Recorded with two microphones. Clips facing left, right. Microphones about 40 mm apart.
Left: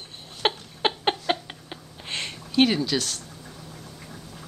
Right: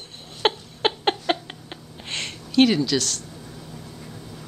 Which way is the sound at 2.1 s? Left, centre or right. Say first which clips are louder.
Right 3 dB; centre.